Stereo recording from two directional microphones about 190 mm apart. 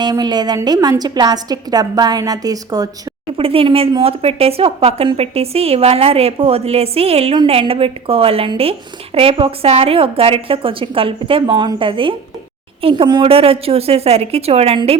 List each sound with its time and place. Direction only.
0.0 s a woman's voice: 20° right (ahead or behind)
3.3 s a woman's voice: 30° right (ahead or behind)